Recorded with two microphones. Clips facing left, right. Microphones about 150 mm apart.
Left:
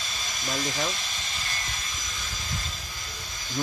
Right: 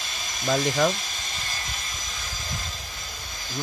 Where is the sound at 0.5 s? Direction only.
60° right (ahead or behind).